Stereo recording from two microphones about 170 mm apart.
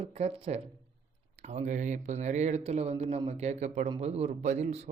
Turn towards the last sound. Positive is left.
turn(degrees=-40)  # may be behind; listen again after turning